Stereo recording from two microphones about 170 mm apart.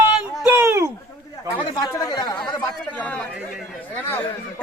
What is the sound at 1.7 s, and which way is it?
Chatter, 25° left (ahead or behind).